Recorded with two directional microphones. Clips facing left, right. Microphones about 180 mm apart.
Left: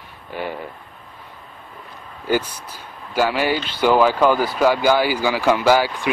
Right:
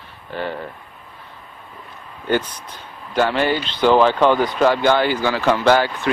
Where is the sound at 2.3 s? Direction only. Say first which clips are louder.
Even; 10° left (ahead or behind).